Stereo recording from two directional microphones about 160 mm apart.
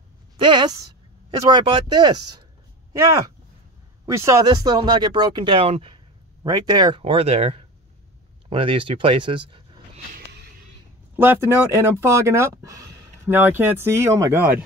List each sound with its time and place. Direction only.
0.4 s speech: 30° right (ahead or behind)
6.4 s speech: 25° right (ahead or behind)
11.1 s speech: 15° right (ahead or behind)